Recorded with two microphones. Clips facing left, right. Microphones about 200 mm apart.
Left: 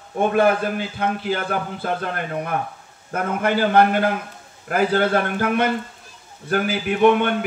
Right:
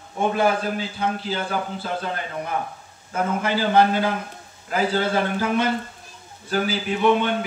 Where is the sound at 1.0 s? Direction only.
55° left (ahead or behind).